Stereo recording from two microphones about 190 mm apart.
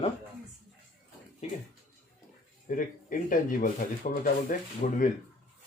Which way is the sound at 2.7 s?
45° left (ahead or behind).